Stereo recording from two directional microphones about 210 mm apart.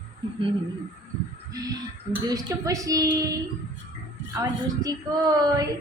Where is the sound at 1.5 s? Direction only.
15° right (ahead or behind).